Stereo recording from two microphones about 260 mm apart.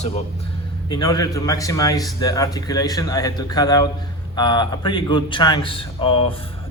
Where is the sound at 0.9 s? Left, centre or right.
Centre.